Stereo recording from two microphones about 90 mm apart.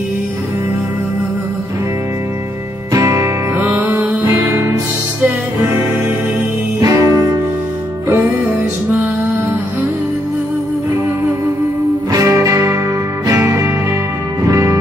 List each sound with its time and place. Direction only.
2.9 s music: 40° right (ahead or behind)
6.8 s music: 35° right (ahead or behind)
12.1 s music: 40° right (ahead or behind)